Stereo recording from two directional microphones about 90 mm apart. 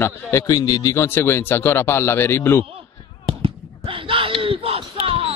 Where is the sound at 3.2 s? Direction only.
85° right.